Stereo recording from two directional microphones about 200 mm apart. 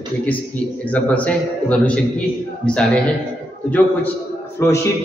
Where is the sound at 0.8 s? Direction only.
5° left (ahead or behind).